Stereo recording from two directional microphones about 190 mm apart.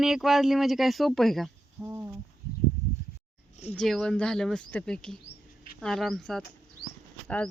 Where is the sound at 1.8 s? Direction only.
10° right (ahead or behind).